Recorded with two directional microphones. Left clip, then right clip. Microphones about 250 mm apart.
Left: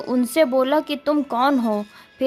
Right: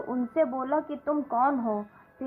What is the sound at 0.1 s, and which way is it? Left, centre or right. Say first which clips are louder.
A woman's voice: left 9 dB; left.